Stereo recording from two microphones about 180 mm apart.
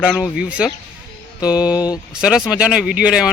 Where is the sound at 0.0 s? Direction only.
5° right (ahead or behind).